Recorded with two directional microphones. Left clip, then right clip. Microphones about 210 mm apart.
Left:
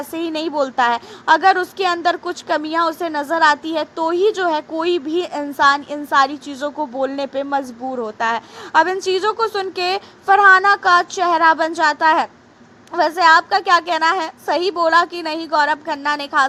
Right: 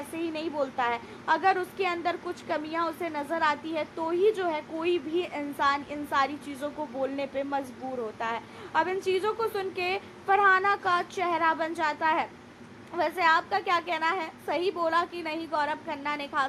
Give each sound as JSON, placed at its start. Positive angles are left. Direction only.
{"t": 0.1, "sound": "a woman's voice", "side_deg": 35}